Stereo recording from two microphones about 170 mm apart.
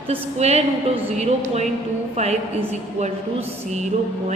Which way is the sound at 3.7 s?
45° right (ahead or behind).